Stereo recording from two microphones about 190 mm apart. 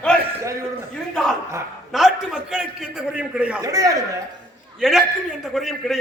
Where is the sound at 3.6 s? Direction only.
20° right (ahead or behind).